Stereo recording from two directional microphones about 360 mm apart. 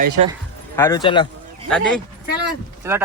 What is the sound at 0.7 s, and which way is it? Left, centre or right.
Speech, centre.